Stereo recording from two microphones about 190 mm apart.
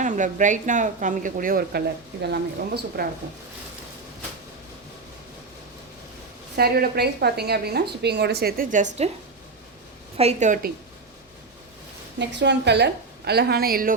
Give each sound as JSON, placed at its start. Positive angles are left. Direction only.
{"t": 0.0, "sound": "a woman's voice", "side_deg": -40}
{"t": 6.6, "sound": "a woman's voice", "side_deg": -55}
{"t": 10.2, "sound": "a woman's voice", "side_deg": -35}
{"t": 12.2, "sound": "a woman's voice", "side_deg": -65}